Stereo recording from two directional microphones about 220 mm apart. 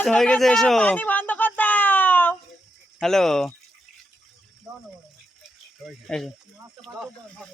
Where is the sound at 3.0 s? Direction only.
Centre (ahead or behind).